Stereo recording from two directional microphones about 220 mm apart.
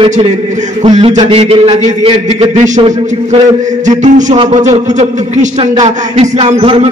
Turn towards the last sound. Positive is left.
turn(degrees=-25)  # may be behind; listen again after turning